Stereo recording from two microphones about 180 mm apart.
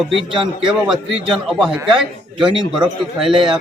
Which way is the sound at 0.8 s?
5° right (ahead or behind).